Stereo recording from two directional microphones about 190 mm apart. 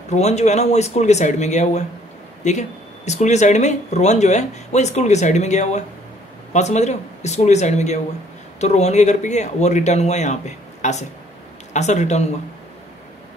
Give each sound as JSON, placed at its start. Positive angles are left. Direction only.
{"t": 0.1, "sound": "speech", "side_deg": 35}